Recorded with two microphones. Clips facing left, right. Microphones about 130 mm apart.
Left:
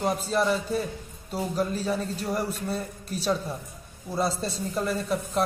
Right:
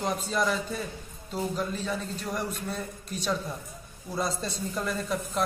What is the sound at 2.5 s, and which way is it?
A man's voice, 5° left (ahead or behind).